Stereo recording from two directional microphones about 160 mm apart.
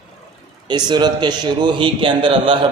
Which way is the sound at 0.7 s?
25° right (ahead or behind).